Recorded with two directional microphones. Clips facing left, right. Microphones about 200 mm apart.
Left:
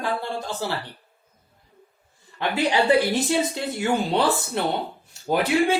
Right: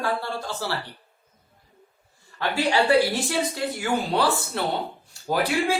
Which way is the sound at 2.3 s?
20° left (ahead or behind).